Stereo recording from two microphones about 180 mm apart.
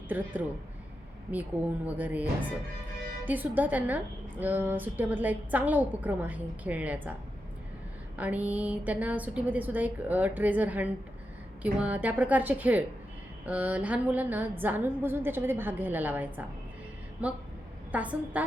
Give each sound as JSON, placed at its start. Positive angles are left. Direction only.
{"t": 0.1, "sound": "a woman's voice", "side_deg": -10}
{"t": 8.2, "sound": "a woman's voice", "side_deg": -10}